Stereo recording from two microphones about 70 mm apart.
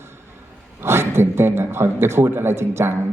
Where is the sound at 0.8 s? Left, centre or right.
Right.